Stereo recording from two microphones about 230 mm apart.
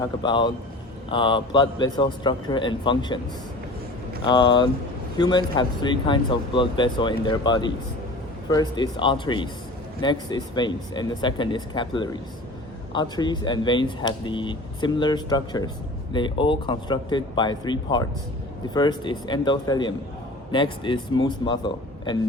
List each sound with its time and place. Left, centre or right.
0.0 s speech: centre
4.3 s speech: centre